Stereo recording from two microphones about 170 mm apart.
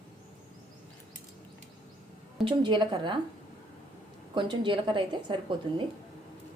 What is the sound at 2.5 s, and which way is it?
Speech, 25° right (ahead or behind).